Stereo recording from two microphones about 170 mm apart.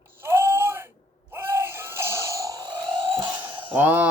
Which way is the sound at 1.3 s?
15° right (ahead or behind).